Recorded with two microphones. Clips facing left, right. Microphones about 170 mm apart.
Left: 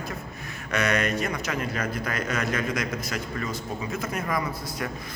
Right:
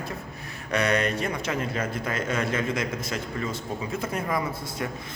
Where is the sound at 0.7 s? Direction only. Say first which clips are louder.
Right 1 dB; 30° right (ahead or behind).